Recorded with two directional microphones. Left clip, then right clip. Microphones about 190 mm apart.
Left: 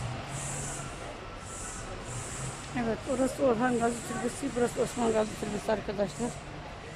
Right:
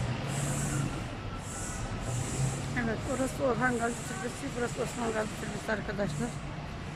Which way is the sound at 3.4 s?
10° left (ahead or behind).